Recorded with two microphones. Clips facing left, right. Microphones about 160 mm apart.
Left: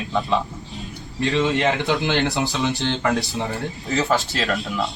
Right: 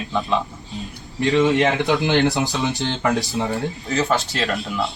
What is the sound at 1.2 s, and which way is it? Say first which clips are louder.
A man's voice: right 4 dB; 20° right (ahead or behind).